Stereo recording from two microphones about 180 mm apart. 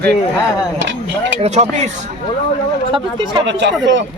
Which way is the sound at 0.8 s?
90° right.